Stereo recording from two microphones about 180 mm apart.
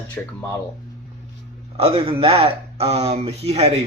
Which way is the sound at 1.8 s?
30° right (ahead or behind).